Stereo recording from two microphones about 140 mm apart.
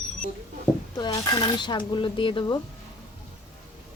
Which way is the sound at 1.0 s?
30° left (ahead or behind).